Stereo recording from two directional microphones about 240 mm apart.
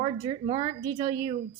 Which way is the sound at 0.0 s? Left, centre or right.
Right.